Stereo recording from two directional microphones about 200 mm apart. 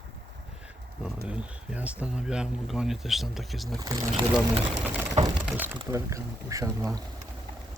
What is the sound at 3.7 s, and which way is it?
Speech, 20° right (ahead or behind).